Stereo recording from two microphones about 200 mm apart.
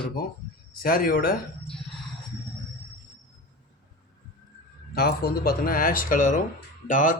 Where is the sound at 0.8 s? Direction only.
45° left (ahead or behind).